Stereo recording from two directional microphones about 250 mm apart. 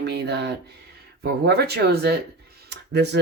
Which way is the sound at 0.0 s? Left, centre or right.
Right.